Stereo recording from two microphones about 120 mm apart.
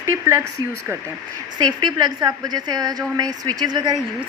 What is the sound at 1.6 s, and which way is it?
A woman's voice, 35° right (ahead or behind).